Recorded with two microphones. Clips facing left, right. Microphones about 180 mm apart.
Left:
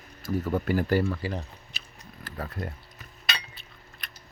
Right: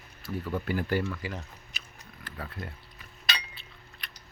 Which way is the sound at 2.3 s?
45° left (ahead or behind).